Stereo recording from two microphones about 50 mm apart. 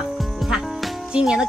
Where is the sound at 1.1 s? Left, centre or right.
Centre.